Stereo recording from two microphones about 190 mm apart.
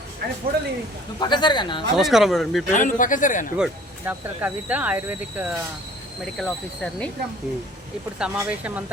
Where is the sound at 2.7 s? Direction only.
45° left (ahead or behind).